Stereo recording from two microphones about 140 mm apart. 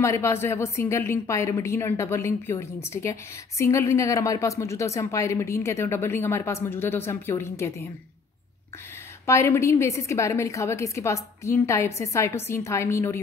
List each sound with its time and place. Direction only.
0.0 s speech: 20° left (ahead or behind)
9.2 s speech: 20° left (ahead or behind)